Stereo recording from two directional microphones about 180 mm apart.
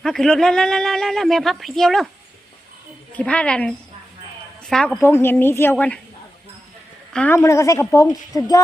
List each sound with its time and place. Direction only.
0.0 s a woman's voice: centre (ahead or behind)
3.2 s a woman's voice: 5° left (ahead or behind)
7.1 s a woman's voice: 10° left (ahead or behind)